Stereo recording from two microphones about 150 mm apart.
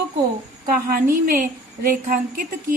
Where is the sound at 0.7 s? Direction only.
70° right (ahead or behind).